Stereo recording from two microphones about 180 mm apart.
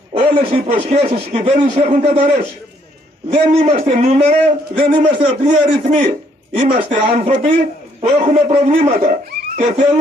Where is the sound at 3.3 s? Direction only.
35° right (ahead or behind).